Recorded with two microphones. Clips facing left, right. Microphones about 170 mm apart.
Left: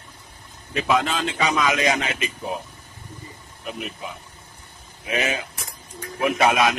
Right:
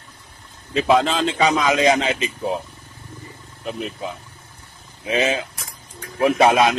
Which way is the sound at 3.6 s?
30° right (ahead or behind).